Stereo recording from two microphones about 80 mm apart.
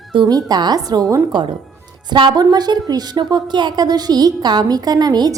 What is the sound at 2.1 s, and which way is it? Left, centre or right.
A woman's voice, right.